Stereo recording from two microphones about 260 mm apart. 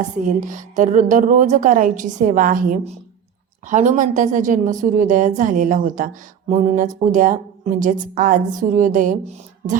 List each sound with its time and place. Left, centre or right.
0.2 s a woman's voice: right